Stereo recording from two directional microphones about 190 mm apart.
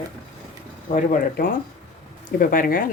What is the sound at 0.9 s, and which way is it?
A woman's voice, 45° left (ahead or behind).